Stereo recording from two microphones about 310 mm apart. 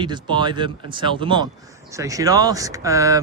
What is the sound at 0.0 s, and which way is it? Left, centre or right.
Speech, centre.